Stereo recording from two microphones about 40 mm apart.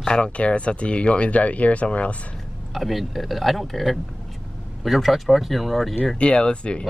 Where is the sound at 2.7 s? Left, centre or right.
Centre.